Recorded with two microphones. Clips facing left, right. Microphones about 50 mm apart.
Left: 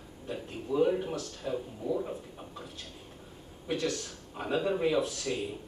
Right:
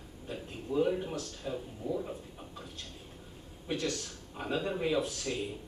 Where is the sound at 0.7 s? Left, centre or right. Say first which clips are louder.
Left 3 dB; left.